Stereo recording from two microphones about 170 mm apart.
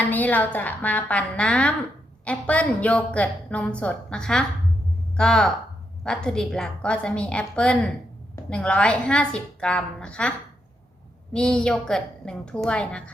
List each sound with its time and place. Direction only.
0.0 s a woman's voice: 10° left (ahead or behind)
11.3 s a woman's voice: 5° left (ahead or behind)